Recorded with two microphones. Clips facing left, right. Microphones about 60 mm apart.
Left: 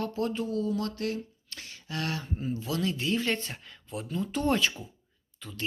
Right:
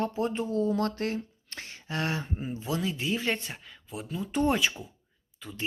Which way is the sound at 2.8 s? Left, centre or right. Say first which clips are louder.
Left 2 dB; centre.